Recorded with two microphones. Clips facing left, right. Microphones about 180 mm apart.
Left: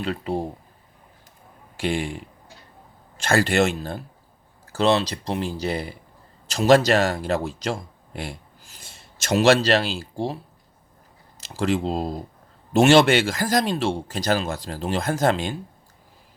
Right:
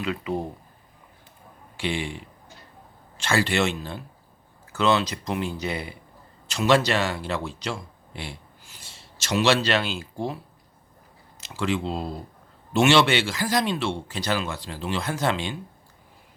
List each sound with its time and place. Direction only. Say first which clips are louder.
0.0 s speech: left 2 dB; 35° left (ahead or behind)
1.7 s speech: left 3 dB; 45° left (ahead or behind)
11.3 s speech: left 3 dB; 40° left (ahead or behind)